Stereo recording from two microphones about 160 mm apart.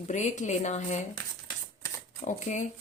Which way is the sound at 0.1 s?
50° left (ahead or behind).